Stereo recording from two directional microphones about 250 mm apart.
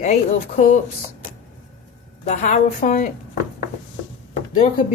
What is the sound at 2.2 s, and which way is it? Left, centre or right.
Speech, left.